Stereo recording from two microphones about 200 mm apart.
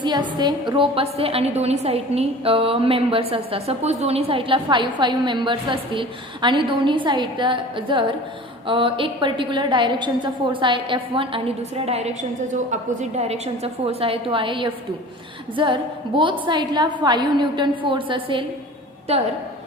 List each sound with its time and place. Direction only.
0.0 s a woman's voice: 20° right (ahead or behind)